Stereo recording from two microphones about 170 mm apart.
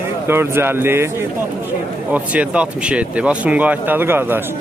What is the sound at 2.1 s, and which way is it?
Speech, 10° right (ahead or behind).